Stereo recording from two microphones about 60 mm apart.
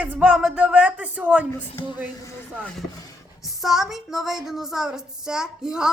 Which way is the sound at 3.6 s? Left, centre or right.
Centre.